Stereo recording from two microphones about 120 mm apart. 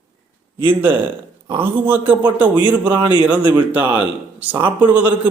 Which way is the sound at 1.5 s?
20° right (ahead or behind).